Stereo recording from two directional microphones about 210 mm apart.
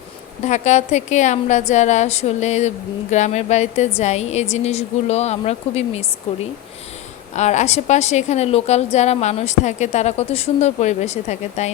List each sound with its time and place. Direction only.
0.4 s a woman's voice: 35° left (ahead or behind)